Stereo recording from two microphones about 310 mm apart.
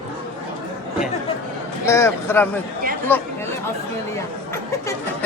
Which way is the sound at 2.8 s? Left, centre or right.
Right.